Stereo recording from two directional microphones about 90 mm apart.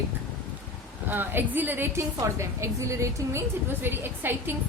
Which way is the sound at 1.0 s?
20° right (ahead or behind).